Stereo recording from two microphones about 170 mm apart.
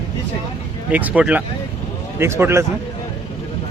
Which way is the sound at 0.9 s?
10° right (ahead or behind).